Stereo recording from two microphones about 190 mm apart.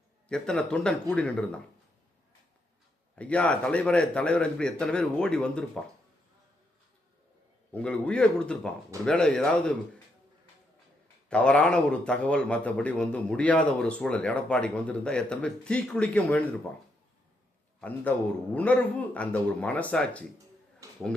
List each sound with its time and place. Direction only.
0.3 s a man's voice: 5° left (ahead or behind)
3.2 s a man's voice: 5° left (ahead or behind)
7.7 s a man's voice: 5° left (ahead or behind)
11.3 s a man's voice: 5° left (ahead or behind)
17.7 s a man's voice: 10° left (ahead or behind)
20.8 s a sound: 15° right (ahead or behind)